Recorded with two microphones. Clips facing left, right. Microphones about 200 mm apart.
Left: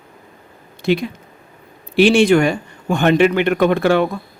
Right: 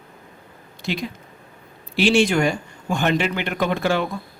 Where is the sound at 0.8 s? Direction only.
60° left (ahead or behind).